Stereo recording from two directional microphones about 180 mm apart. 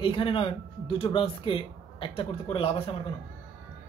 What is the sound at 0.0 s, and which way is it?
Speech, 30° left (ahead or behind).